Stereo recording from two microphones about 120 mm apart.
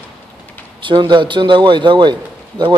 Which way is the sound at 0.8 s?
40° right (ahead or behind).